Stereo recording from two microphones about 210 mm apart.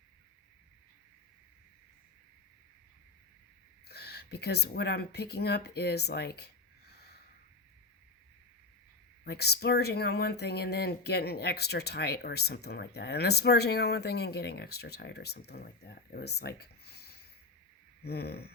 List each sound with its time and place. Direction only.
3.8 s speech: 50° left (ahead or behind)
9.2 s speech: 50° left (ahead or behind)